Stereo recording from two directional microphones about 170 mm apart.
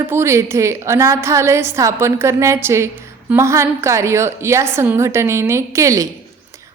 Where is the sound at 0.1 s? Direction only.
15° right (ahead or behind).